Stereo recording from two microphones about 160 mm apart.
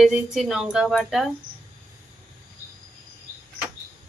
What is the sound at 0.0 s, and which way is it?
A woman's voice, centre (ahead or behind).